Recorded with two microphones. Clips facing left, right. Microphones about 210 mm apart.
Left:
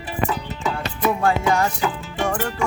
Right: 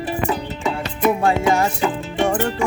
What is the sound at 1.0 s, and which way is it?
Music, 20° right (ahead or behind).